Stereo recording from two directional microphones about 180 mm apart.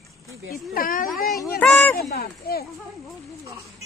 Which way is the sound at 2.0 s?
60° left (ahead or behind).